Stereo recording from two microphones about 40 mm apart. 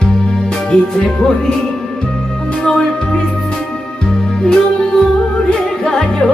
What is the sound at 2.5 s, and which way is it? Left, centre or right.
Music, left.